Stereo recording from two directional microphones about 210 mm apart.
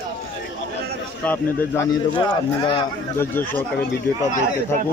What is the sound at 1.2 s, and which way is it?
Speech, 10° left (ahead or behind).